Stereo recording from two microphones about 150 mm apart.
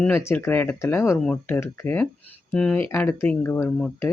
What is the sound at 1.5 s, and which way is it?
Speech, 15° left (ahead or behind).